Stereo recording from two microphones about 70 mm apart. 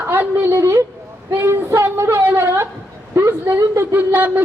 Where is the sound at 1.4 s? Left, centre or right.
Right.